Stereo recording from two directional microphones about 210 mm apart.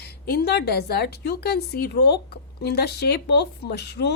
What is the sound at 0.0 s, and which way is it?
A woman's voice, 50° left (ahead or behind).